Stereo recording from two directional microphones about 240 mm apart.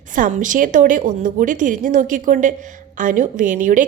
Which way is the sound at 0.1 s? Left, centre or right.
Right.